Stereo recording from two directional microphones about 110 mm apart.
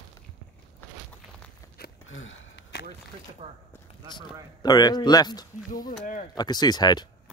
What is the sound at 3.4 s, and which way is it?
Speech, 90° right.